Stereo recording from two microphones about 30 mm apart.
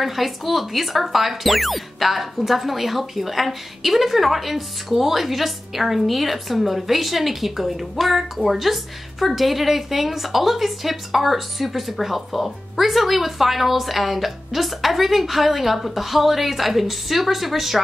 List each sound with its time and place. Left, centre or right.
0.0 s speech: centre